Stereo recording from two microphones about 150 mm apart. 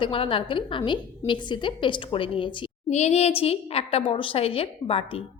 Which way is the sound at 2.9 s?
45° left (ahead or behind).